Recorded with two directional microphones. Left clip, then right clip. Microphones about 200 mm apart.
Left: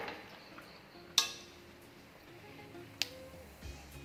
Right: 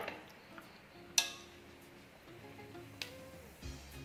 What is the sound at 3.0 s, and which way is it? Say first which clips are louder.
Music: left 8 dB; 45° left (ahead or behind).